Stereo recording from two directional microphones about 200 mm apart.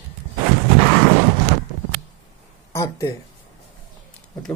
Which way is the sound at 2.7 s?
15° left (ahead or behind).